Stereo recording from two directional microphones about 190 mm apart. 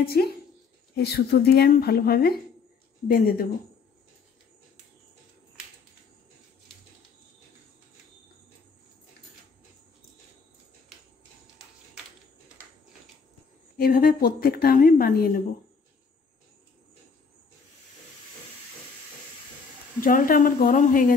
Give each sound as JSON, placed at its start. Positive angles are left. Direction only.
{"t": 0.0, "sound": "speech", "side_deg": 55}
{"t": 13.7, "sound": "speech", "side_deg": 50}
{"t": 20.0, "sound": "speech", "side_deg": 45}